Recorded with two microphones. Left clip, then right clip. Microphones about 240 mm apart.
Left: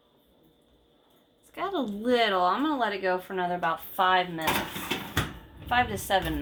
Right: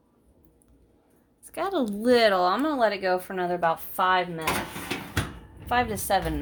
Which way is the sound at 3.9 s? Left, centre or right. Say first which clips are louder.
Left 4 dB; right.